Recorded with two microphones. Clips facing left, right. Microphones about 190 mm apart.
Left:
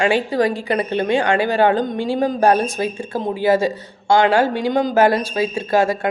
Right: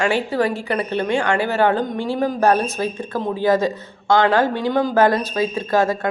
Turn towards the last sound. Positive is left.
turn(degrees=10)  # may be behind; listen again after turning